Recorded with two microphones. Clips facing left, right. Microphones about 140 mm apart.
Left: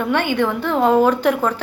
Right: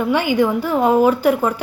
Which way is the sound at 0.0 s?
10° right (ahead or behind).